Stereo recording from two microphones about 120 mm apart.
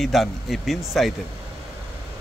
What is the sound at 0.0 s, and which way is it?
Speech, centre (ahead or behind).